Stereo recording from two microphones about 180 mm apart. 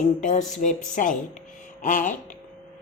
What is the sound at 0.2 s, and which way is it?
A woman's voice, 45° left (ahead or behind).